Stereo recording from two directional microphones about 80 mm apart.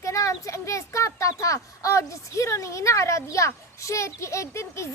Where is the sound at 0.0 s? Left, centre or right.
Left.